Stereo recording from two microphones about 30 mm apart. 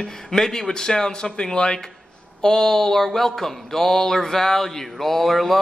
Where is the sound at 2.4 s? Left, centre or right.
Centre.